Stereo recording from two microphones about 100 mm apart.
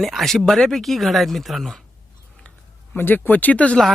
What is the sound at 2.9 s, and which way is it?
Speech, 20° left (ahead or behind).